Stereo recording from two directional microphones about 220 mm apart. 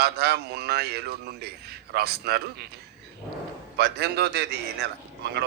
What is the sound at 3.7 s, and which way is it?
Speech, 50° right (ahead or behind).